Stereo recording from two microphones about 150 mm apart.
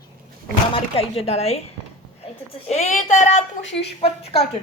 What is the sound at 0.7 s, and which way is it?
Speech, 40° left (ahead or behind).